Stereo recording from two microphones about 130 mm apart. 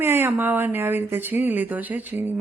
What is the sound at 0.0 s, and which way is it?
Speech, 15° right (ahead or behind).